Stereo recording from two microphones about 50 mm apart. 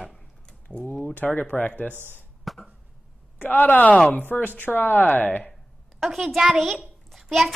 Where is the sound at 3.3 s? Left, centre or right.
Left.